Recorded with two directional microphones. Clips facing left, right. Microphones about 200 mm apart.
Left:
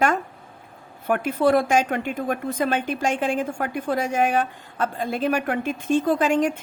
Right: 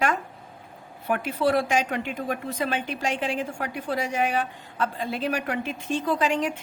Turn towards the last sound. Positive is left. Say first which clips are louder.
# left 4 dB
turn(degrees=50)  # may be behind; listen again after turning